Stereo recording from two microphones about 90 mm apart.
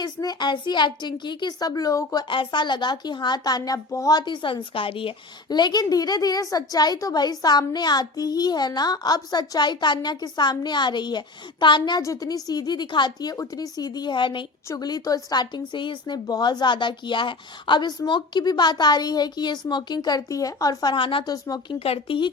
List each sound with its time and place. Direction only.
0.0 s speech: 45° left (ahead or behind)
2.3 s speech: 65° left (ahead or behind); by 4.2 s 40° left (ahead or behind)
4.2 s speech: 60° left (ahead or behind); by 5.1 s 80° left
5.5 s a woman's voice: 50° left (ahead or behind)
12.0 s speech: 40° left (ahead or behind); by 14.4 s 60° left (ahead or behind)
14.8 s speech: 45° left (ahead or behind)
20.9 s speech: 70° left (ahead or behind)
21.2 s speech: 40° left (ahead or behind)
21.7 s speech: 80° left